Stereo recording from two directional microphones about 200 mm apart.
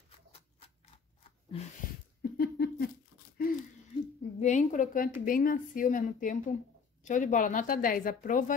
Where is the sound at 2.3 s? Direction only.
50° left (ahead or behind).